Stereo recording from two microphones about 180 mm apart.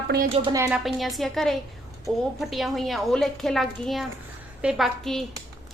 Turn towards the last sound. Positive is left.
turn(degrees=0)  # may be behind; listen again after turning